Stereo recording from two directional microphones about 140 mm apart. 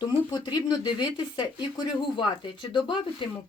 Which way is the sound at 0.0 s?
30° left (ahead or behind).